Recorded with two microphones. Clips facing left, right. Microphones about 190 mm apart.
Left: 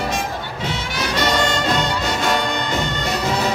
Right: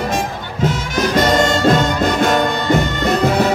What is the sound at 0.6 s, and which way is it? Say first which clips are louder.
Music: right 10 dB; 45° right (ahead or behind).